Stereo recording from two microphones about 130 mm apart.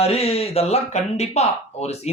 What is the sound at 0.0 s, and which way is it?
A man's voice, 50° left (ahead or behind).